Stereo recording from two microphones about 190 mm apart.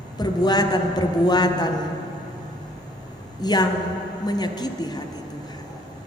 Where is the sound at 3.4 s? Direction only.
20° left (ahead or behind).